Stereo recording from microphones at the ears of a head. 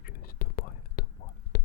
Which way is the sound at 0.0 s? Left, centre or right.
Left.